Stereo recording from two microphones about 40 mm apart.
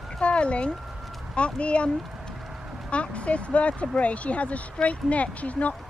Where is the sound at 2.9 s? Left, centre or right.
Left.